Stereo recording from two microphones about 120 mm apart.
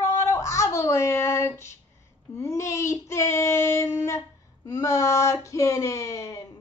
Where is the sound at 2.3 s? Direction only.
25° left (ahead or behind).